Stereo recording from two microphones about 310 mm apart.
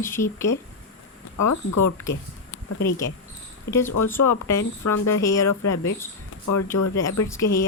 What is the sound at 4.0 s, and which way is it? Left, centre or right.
Speech, left.